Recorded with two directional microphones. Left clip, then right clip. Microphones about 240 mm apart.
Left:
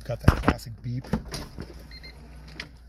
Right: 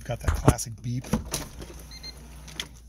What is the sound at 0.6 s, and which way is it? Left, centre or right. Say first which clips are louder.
Speech: right 4 dB; centre.